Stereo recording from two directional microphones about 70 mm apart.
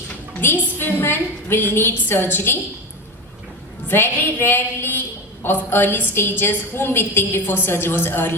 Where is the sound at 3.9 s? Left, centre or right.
Left.